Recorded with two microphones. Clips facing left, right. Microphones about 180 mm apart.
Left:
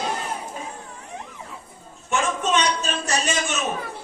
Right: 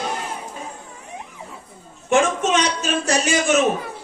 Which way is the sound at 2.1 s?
85° right.